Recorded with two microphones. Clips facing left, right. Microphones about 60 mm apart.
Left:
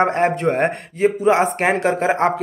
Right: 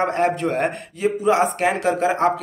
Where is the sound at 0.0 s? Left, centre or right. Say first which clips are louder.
Left 3 dB; left.